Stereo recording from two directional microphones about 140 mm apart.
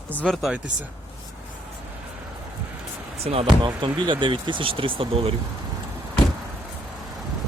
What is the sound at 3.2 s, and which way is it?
Speech, 45° right (ahead or behind).